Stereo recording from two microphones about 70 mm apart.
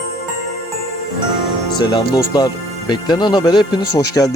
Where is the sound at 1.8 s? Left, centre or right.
Left.